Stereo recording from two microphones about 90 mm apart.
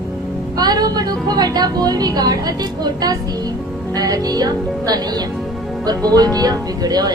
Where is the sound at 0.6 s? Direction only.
50° right (ahead or behind).